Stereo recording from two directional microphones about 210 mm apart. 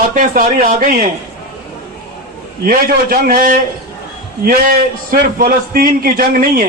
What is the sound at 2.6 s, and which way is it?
A man's voice, 45° right (ahead or behind).